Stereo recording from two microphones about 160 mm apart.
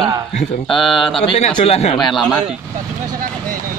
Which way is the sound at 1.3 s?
35° left (ahead or behind).